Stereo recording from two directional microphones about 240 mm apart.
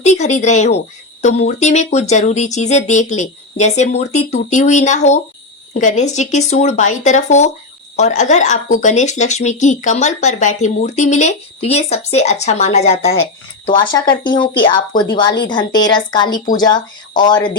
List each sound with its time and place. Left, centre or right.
0.0 s a woman's voice: left